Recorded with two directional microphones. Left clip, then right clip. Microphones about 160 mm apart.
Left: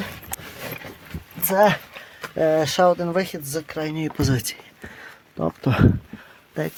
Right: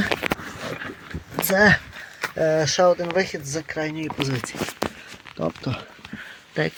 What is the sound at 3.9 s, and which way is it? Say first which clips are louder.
Speech: left 2 dB; 40° left (ahead or behind).